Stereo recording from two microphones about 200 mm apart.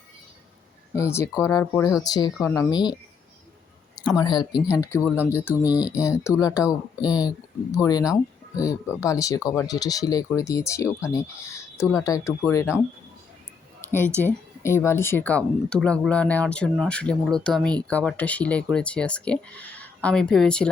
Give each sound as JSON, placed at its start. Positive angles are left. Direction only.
{"t": 0.9, "sound": "speech", "side_deg": 15}
{"t": 4.1, "sound": "speech", "side_deg": 20}
{"t": 5.5, "sound": "speech", "side_deg": -5}
{"t": 5.9, "sound": "speech", "side_deg": 15}
{"t": 14.2, "sound": "speech", "side_deg": 10}